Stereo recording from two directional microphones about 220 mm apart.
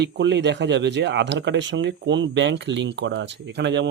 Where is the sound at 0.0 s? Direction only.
50° right (ahead or behind).